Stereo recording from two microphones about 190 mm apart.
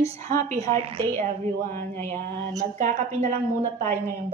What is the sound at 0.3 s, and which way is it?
Speech, 45° right (ahead or behind).